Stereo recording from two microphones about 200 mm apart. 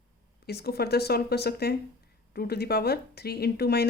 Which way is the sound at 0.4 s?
50° left (ahead or behind).